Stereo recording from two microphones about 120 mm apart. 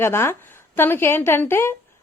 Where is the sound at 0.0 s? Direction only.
20° left (ahead or behind).